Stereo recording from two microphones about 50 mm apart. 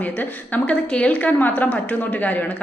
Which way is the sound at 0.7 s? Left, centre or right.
Left.